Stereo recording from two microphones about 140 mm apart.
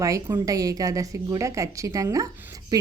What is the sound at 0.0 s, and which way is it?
A woman's voice, 25° right (ahead or behind).